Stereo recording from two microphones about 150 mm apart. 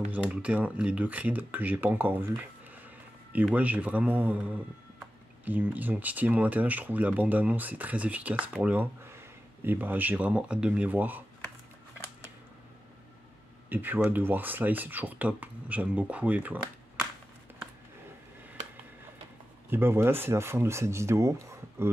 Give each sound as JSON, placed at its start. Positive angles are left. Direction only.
{"t": 0.1, "sound": "speech", "side_deg": -10}
{"t": 3.4, "sound": "speech", "side_deg": -10}
{"t": 5.4, "sound": "speech", "side_deg": -10}
{"t": 13.7, "sound": "speech", "side_deg": -15}
{"t": 19.7, "sound": "speech", "side_deg": -15}